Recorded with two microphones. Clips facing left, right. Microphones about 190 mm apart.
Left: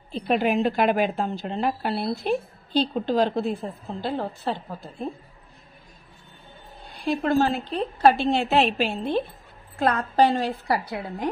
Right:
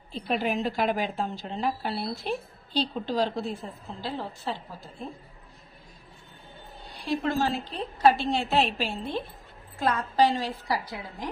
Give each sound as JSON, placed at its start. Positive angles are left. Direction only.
{"t": 0.1, "sound": "a woman's voice", "side_deg": 60}
{"t": 7.1, "sound": "a woman's voice", "side_deg": 55}